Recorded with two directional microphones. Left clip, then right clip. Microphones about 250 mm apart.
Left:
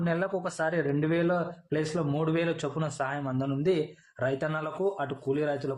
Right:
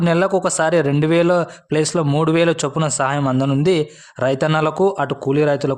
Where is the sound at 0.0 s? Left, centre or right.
Right.